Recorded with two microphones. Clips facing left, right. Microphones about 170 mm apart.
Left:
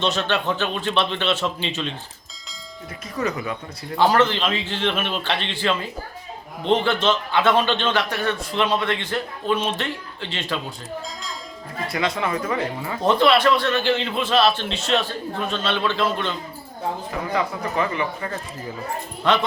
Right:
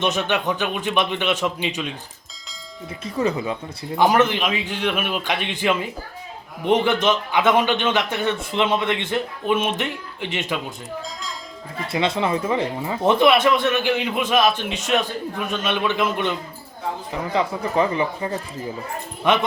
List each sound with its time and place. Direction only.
0.0 s speech: 15° right (ahead or behind)
3.0 s speech: 25° right (ahead or behind)
11.9 s speech: 25° right (ahead or behind)
17.3 s speech: 30° right (ahead or behind)
19.2 s speech: 20° right (ahead or behind)